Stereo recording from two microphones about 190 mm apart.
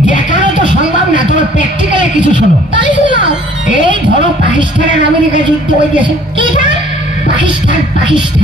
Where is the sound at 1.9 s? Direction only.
25° right (ahead or behind).